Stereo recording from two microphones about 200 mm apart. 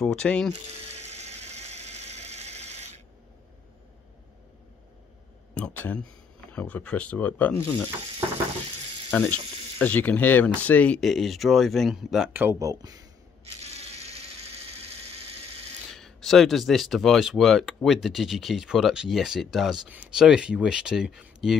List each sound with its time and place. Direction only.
0.0 s speech: 5° left (ahead or behind)
0.9 s a sound: 35° right (ahead or behind)
5.5 s speech: 10° left (ahead or behind)
9.1 s speech: 10° left (ahead or behind); by 13.0 s 15° right (ahead or behind)
13.6 s a sound: 30° right (ahead or behind)
15.9 s speech: centre (ahead or behind)